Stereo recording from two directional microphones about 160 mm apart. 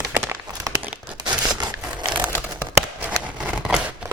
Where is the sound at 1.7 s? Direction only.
10° right (ahead or behind).